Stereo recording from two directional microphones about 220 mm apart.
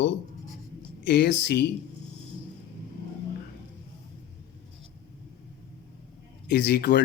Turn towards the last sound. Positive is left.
turn(degrees=50)  # may be behind; listen again after turning